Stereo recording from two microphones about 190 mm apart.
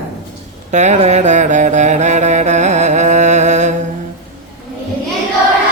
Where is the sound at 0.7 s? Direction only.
40° right (ahead or behind).